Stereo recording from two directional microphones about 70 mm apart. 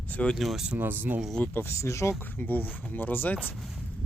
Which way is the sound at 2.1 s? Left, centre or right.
Left.